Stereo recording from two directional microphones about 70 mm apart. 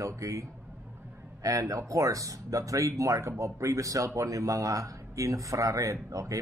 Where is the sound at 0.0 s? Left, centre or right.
Right.